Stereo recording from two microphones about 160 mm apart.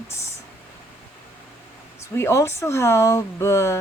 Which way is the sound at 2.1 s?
15° left (ahead or behind).